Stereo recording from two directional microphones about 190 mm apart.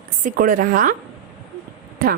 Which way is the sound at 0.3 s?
45° right (ahead or behind).